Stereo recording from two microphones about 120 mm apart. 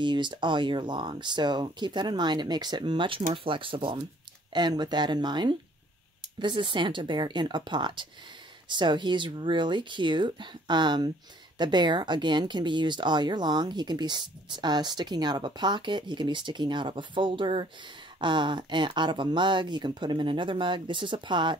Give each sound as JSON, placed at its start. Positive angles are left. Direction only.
{"t": 0.0, "sound": "speech", "side_deg": -40}